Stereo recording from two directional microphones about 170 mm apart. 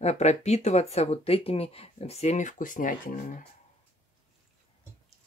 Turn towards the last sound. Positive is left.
turn(degrees=50)  # may be behind; listen again after turning